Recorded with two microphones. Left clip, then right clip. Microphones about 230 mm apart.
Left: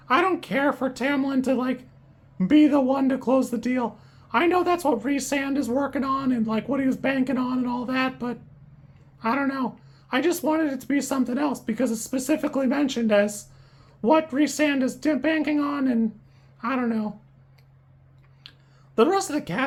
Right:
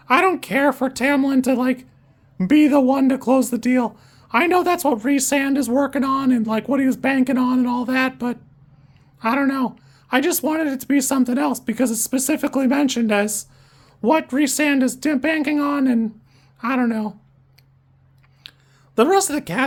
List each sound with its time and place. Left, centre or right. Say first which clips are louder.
0.0 s speech: right 5 dB; right
18.4 s a sound: right 6 dB; right
18.9 s speech: right 5 dB; right